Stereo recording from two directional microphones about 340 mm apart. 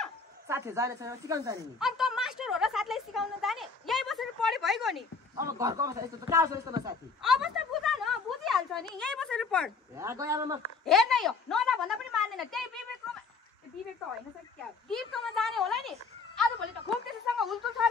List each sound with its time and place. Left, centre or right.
0.0 s a man's voice: centre
14.9 s a child's voice: centre